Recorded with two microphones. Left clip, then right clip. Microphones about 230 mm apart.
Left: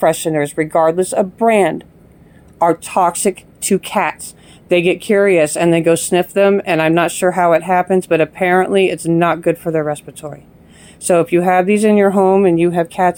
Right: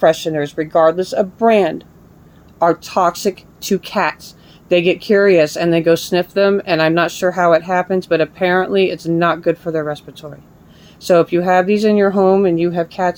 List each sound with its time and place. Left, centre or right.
0.0 s a woman's voice: left
2.9 s a woman's voice: left